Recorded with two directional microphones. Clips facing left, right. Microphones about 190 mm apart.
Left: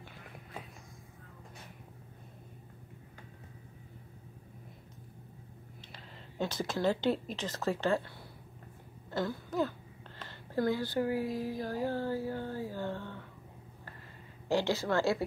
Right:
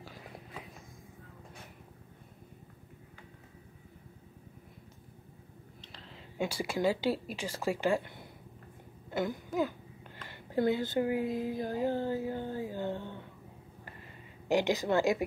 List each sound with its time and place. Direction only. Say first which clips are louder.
5.8 s a sound: even; 5° left (ahead or behind)
6.3 s speech: right 1 dB; 10° right (ahead or behind)
14.5 s speech: right 2 dB; 15° right (ahead or behind)